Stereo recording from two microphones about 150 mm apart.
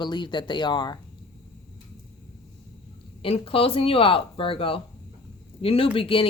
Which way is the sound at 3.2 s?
40° left (ahead or behind).